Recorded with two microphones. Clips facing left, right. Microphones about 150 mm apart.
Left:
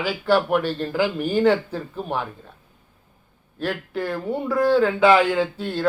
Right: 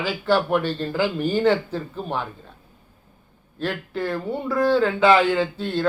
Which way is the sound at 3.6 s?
5° left (ahead or behind).